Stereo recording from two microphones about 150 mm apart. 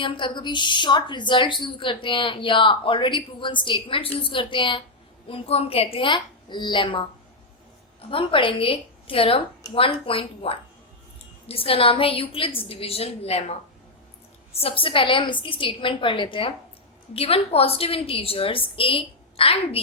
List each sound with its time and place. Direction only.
0.0 s a woman's voice: 30° left (ahead or behind)
8.1 s a woman's voice: 35° left (ahead or behind)